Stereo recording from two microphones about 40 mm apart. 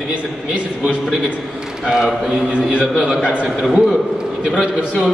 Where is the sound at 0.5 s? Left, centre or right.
Right.